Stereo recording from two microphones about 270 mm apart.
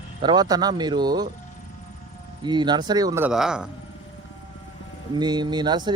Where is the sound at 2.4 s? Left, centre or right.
Centre.